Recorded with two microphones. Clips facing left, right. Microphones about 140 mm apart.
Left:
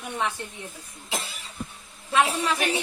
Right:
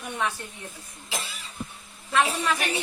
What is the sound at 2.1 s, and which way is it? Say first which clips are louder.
Speech: left 1 dB; 15° left (ahead or behind).